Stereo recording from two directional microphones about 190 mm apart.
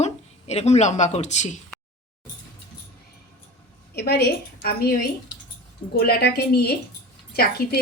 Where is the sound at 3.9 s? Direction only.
65° left (ahead or behind).